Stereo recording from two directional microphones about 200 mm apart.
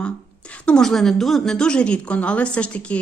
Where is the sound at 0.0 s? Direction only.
5° left (ahead or behind).